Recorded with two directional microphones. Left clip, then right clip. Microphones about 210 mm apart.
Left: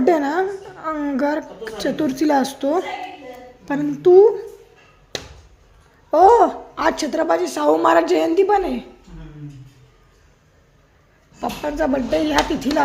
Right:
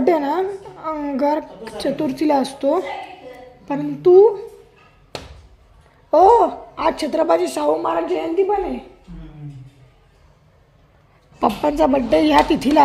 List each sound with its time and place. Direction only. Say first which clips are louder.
0.0 s a woman's voice: even; centre (ahead or behind)
6.1 s a woman's voice: even; 5° right (ahead or behind)
7.7 s a woman's voice: left 7 dB; 20° left (ahead or behind)
11.3 s speech: right 6 dB; 20° right (ahead or behind)